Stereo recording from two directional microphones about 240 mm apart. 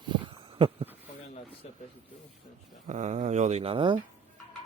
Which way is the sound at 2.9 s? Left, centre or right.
Right.